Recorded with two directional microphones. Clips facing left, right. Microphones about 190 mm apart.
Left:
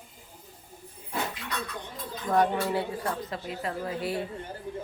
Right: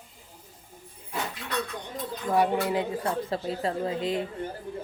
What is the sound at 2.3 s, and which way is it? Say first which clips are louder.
Speech: right 1 dB; 5° right (ahead or behind).